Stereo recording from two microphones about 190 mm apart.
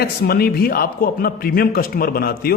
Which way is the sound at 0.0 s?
55° left (ahead or behind).